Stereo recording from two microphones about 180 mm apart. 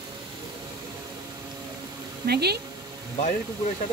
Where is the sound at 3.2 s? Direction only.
45° left (ahead or behind).